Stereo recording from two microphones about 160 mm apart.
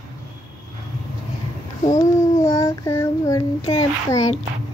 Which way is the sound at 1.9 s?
20° left (ahead or behind).